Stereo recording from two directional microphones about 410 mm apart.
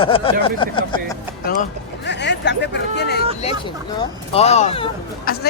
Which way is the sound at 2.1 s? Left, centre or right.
Left.